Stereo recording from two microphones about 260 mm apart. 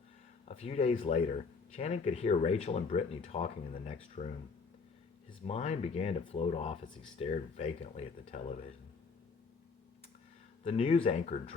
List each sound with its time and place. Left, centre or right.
0.4 s speech: left
5.5 s speech: left
10.6 s speech: left